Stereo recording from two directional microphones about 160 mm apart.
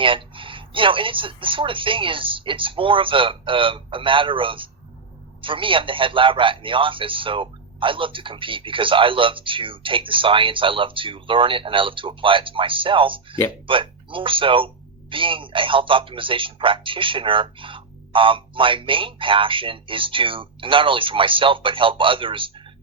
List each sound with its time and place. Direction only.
0.0 s a man's voice: 30° right (ahead or behind)